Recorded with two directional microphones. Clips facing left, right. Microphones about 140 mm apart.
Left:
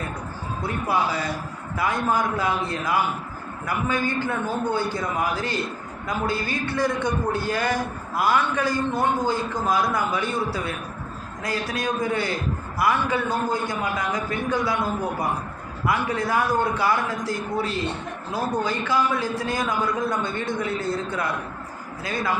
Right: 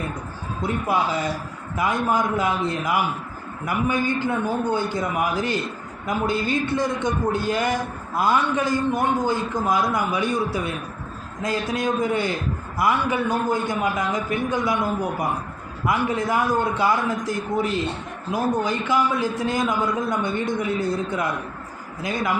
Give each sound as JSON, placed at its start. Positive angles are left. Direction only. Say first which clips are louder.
{"t": 0.6, "sound": "a man's voice", "louder": "right 2 dB", "side_deg": -20}
{"t": 15.9, "sound": "a man's voice", "louder": "right 2 dB", "side_deg": -20}